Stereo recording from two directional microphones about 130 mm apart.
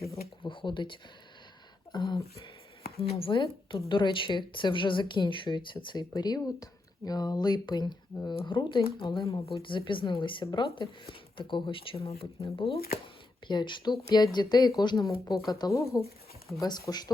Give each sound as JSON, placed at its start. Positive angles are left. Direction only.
{"t": 0.4, "sound": "a sound", "side_deg": 40}
{"t": 3.0, "sound": "speech", "side_deg": 45}
{"t": 13.5, "sound": "speech", "side_deg": 35}